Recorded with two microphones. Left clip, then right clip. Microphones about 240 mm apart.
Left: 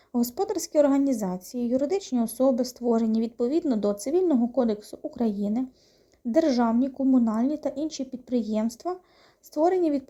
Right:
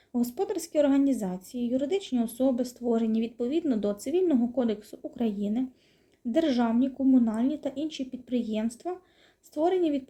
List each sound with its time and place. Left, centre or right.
0.3 s speech: centre
1.1 s a woman's voice: centre
1.5 s speech: centre